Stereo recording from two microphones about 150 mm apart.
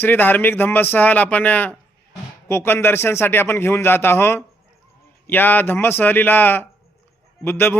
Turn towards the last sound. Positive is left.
turn(degrees=15)  # may be behind; listen again after turning